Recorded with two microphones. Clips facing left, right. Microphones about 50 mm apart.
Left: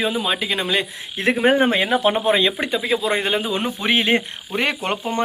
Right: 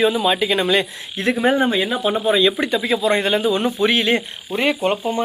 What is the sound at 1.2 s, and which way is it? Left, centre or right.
Speech, left.